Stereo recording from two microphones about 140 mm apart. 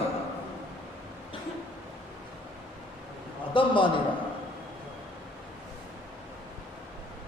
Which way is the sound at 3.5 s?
35° left (ahead or behind).